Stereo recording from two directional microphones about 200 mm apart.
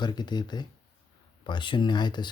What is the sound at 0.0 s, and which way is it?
Speech, 20° left (ahead or behind).